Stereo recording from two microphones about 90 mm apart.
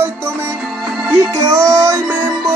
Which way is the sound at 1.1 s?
30° right (ahead or behind).